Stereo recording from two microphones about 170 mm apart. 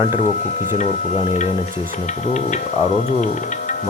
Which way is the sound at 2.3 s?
45° left (ahead or behind).